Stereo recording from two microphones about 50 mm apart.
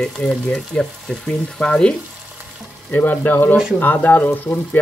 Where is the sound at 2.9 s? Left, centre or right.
Left.